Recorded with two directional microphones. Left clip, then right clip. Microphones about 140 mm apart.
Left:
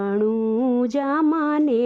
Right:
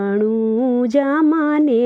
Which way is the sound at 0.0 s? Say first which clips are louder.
Right 3 dB; 20° right (ahead or behind).